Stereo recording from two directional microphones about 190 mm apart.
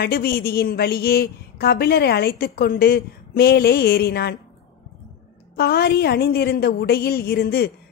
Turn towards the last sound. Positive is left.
turn(degrees=55)  # may be behind; listen again after turning